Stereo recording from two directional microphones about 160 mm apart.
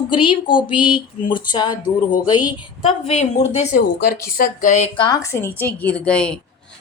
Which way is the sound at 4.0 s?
65° left (ahead or behind).